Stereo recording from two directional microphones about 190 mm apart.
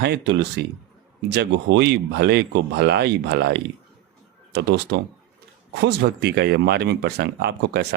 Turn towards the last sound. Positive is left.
turn(degrees=-60)  # may be behind; listen again after turning